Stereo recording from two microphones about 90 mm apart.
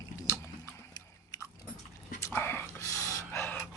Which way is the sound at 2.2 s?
25° left (ahead or behind).